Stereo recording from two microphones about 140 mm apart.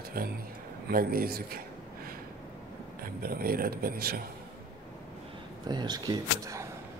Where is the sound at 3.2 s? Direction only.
90° right.